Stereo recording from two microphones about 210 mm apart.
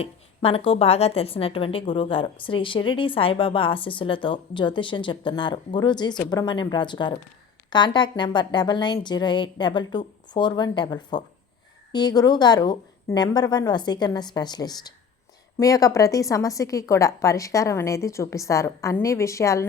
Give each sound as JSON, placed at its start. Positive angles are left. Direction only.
{"t": 0.0, "sound": "a woman's voice", "side_deg": 25}